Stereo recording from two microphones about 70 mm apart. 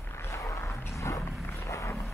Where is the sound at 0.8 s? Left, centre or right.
Left.